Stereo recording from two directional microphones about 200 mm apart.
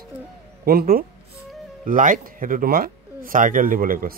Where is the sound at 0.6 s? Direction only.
50° right (ahead or behind).